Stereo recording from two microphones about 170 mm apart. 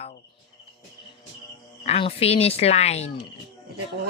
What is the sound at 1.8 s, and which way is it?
Speech, 40° left (ahead or behind).